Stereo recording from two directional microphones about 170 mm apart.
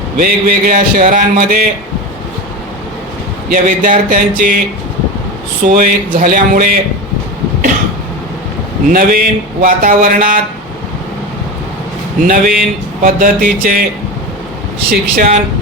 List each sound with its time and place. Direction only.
0.2 s speech: 55° right (ahead or behind)
3.5 s speech: 50° right (ahead or behind)
5.6 s a man's voice: 50° right (ahead or behind)
8.9 s a man's voice: 55° right (ahead or behind)
12.2 s speech: 55° right (ahead or behind)
14.8 s a man's voice: 60° right (ahead or behind)